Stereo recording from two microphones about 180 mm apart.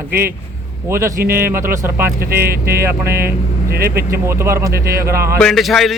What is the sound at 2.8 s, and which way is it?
Speech, 15° right (ahead or behind).